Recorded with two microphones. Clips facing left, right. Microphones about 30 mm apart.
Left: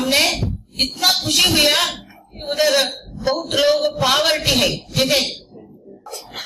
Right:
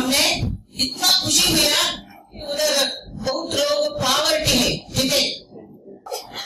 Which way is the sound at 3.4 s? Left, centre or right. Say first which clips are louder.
Left 4 dB; left.